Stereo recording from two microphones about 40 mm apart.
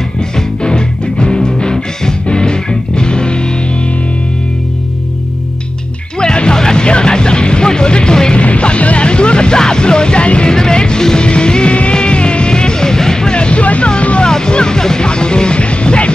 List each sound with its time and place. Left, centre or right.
0.4 s music: left
6.1 s music: left
8.4 s music: left